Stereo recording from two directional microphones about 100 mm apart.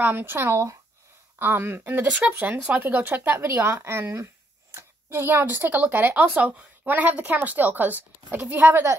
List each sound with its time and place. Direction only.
0.0 s speech: 20° right (ahead or behind)